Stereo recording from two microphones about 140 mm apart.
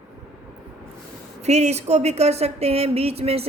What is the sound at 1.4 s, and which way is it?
Speech, 50° right (ahead or behind).